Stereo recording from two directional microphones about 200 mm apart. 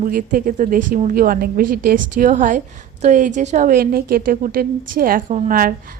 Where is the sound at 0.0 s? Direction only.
45° right (ahead or behind).